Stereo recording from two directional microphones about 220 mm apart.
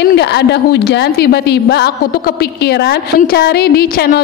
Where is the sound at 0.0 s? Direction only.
50° left (ahead or behind).